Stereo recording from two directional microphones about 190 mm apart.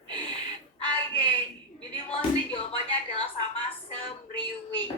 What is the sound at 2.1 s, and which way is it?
Music, 30° left (ahead or behind).